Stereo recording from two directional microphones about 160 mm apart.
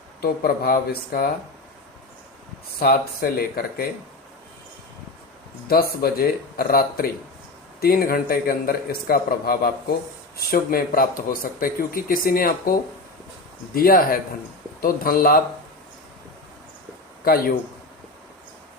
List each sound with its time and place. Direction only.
0.2 s speech: 65° left (ahead or behind)
2.7 s a man's voice: 70° left (ahead or behind)
5.6 s a man's voice: 70° left (ahead or behind)
13.7 s speech: 65° left (ahead or behind)
17.2 s speech: 65° left (ahead or behind)